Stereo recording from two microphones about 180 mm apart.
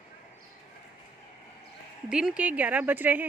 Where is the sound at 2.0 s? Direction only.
5° right (ahead or behind).